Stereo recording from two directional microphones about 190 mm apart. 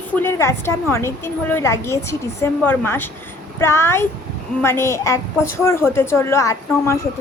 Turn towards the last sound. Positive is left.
turn(degrees=15)  # may be behind; listen again after turning